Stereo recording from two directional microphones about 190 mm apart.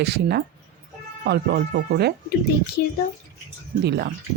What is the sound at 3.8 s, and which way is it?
Speech, 60° right (ahead or behind).